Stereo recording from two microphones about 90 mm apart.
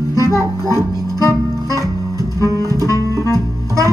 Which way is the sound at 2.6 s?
40° right (ahead or behind).